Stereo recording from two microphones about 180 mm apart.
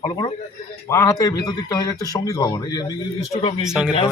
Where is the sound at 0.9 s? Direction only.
15° left (ahead or behind).